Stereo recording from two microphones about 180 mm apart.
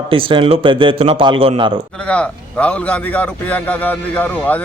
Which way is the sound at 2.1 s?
5° left (ahead or behind).